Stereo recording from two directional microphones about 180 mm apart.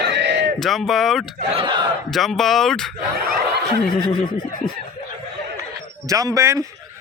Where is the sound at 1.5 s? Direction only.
25° right (ahead or behind).